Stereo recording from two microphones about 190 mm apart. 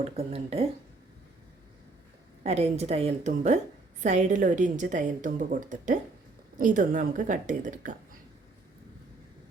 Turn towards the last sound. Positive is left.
turn(degrees=-40)  # may be behind; listen again after turning